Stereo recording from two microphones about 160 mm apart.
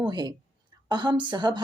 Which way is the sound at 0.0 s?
25° right (ahead or behind).